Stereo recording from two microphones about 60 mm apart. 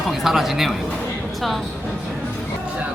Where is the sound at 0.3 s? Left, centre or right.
Centre.